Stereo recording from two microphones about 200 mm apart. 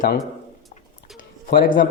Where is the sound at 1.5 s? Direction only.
45° left (ahead or behind).